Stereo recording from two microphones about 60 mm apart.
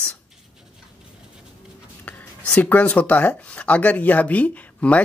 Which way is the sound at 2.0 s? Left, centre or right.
Left.